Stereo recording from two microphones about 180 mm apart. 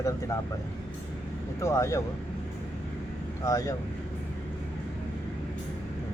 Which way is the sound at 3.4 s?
20° left (ahead or behind).